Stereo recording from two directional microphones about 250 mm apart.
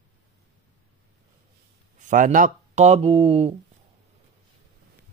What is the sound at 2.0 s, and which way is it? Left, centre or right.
Speech, right.